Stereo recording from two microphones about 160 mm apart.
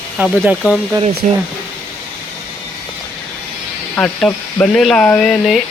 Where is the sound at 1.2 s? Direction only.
50° right (ahead or behind).